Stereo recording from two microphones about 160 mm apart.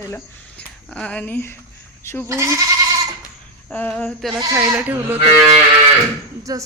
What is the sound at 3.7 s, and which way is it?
Speech, 10° left (ahead or behind).